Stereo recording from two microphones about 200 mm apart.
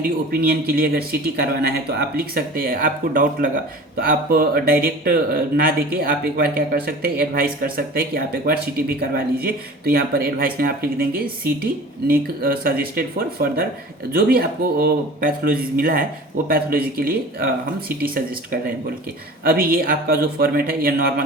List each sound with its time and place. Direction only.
0.0 s speech: 50° right (ahead or behind)
19.5 s speech: 50° right (ahead or behind)